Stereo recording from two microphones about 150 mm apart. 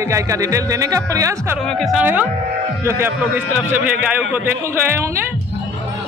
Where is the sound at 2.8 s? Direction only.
15° right (ahead or behind).